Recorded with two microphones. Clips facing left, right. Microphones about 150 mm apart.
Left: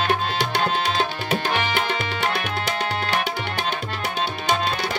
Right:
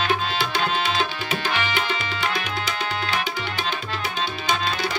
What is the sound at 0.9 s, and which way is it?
Tabla, 50° left (ahead or behind).